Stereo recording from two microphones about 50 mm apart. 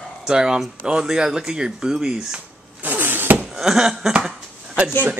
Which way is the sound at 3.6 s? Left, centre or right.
Centre.